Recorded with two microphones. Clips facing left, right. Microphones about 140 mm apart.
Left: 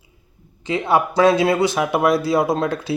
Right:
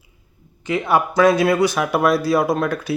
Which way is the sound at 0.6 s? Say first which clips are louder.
Even; 25° left (ahead or behind).